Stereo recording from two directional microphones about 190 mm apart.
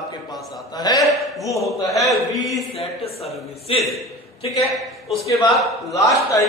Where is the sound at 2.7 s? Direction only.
30° left (ahead or behind).